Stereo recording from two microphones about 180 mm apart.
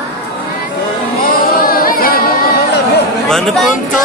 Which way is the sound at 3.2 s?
Centre (ahead or behind).